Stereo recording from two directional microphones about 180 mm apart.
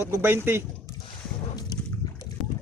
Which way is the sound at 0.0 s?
15° right (ahead or behind).